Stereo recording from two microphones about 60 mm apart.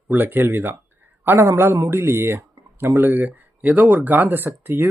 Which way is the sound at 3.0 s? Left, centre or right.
Right.